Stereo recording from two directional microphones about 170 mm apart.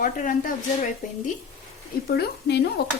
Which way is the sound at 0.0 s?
50° left (ahead or behind).